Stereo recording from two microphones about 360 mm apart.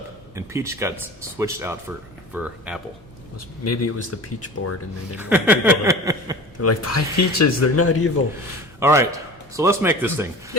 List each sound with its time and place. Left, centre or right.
0.3 s speech: centre
3.6 s speech: left
5.1 s speech: centre
6.6 s speech: left
8.8 s speech: centre